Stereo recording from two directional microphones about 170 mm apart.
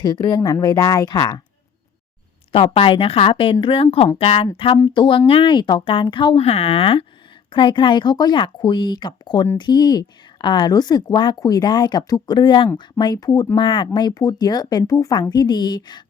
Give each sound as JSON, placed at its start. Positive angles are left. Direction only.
{"t": 0.0, "sound": "a woman's voice", "side_deg": 25}
{"t": 2.5, "sound": "a woman's voice", "side_deg": 35}